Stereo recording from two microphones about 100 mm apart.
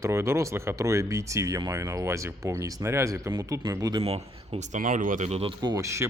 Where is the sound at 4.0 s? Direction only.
90° right.